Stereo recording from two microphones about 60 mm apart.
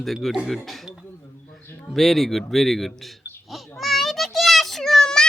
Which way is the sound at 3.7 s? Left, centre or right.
Centre.